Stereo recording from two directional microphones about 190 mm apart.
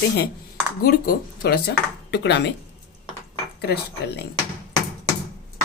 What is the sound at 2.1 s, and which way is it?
Speech, 65° left (ahead or behind).